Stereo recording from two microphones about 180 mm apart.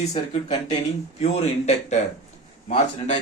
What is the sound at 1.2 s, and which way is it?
A man's voice, 35° left (ahead or behind).